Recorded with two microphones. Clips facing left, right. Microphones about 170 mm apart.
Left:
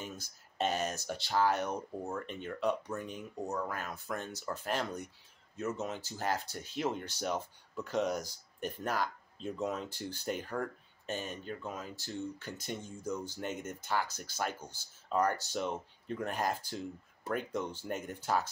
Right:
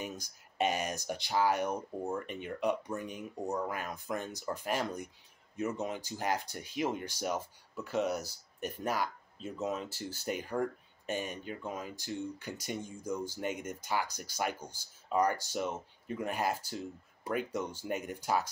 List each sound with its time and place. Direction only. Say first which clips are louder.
0.0 s speech: right 3 dB; 15° right (ahead or behind)